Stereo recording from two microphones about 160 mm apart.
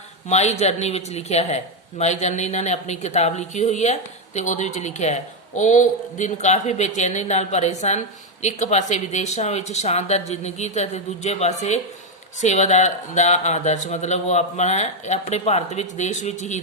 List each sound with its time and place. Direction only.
0.3 s speech: 45° left (ahead or behind)